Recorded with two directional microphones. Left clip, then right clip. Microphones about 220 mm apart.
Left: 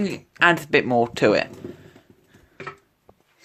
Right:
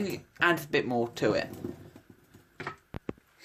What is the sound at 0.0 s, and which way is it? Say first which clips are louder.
Speech: left 9 dB; 35° left (ahead or behind).